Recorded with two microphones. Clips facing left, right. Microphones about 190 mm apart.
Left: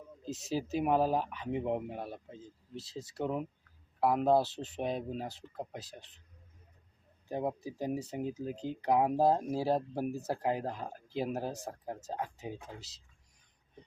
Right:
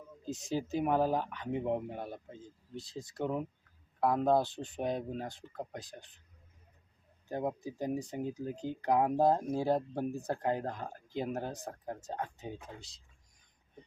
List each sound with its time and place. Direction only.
0.3 s speech: 5° left (ahead or behind)
7.3 s speech: 5° left (ahead or behind)
8.2 s speech: 20° left (ahead or behind)
8.8 s speech: 10° left (ahead or behind)